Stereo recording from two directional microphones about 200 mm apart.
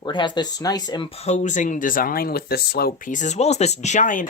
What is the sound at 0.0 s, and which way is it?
Speech, 25° left (ahead or behind).